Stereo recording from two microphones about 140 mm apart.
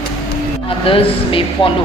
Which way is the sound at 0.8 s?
40° left (ahead or behind).